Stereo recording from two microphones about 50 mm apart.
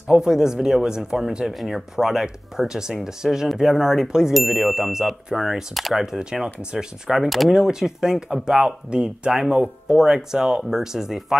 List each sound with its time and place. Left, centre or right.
0.1 s speech: centre
6.0 s speech: centre
7.2 s speech: centre
7.5 s speech: centre